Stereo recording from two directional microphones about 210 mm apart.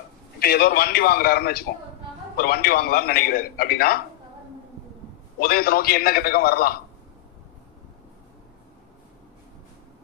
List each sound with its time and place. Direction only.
0.3 s a man's voice: 50° left (ahead or behind)
5.4 s a man's voice: 45° left (ahead or behind)